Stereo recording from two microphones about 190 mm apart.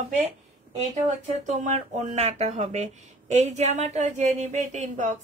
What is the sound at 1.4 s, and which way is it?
Speech, 40° right (ahead or behind).